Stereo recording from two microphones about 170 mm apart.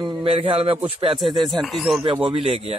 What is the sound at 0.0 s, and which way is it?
A man's voice, 35° right (ahead or behind).